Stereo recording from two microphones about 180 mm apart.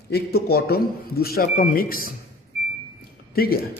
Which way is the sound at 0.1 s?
60° left (ahead or behind).